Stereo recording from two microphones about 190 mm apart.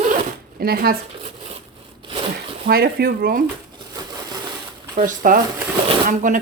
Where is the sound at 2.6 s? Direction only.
50° right (ahead or behind).